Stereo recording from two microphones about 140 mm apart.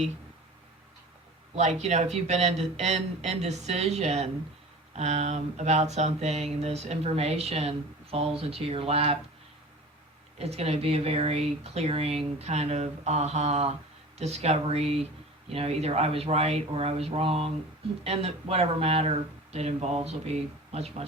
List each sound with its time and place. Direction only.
1.5 s speech: 55° right (ahead or behind)
10.3 s speech: 45° right (ahead or behind)